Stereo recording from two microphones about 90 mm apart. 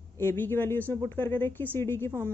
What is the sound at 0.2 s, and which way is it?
A woman's voice, 25° left (ahead or behind).